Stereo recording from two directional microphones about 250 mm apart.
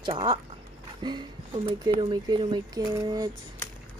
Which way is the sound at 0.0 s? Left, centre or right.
Centre.